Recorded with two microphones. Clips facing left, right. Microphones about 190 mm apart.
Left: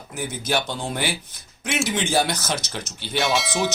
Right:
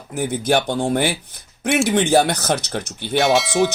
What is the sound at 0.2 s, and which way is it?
Speech, 55° right (ahead or behind).